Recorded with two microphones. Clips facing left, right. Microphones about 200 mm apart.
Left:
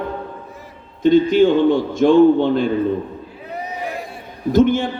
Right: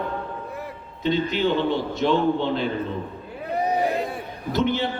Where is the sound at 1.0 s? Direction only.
50° left (ahead or behind).